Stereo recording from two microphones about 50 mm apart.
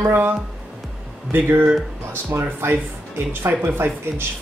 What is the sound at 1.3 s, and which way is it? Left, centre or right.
A woman's voice, right.